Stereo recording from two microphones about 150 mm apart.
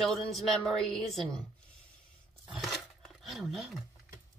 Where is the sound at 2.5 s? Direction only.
Centre (ahead or behind).